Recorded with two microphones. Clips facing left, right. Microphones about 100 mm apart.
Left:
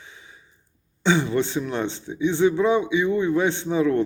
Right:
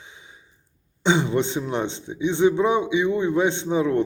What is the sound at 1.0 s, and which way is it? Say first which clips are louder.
A man's voice: even; 20° right (ahead or behind).